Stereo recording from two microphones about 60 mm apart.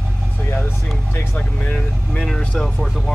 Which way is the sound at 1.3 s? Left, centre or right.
Centre.